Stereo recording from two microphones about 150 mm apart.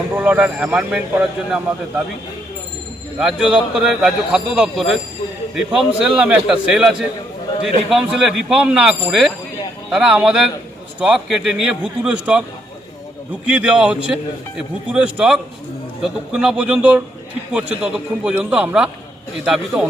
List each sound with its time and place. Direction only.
0.2 s speech: 10° right (ahead or behind)
3.2 s a man's voice: 5° right (ahead or behind)
13.5 s a man's voice: 10° right (ahead or behind)